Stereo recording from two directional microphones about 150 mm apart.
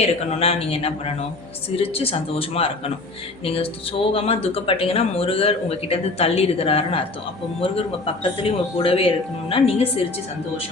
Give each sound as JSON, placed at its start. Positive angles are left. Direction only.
{"t": 0.0, "sound": "speech", "side_deg": 45}